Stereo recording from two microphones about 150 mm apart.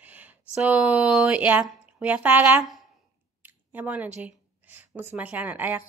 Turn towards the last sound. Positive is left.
turn(degrees=-10)  # may be behind; listen again after turning